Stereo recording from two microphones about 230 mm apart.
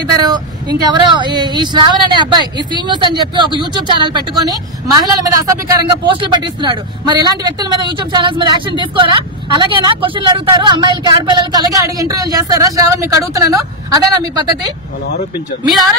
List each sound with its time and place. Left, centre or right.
0.0 s speech: centre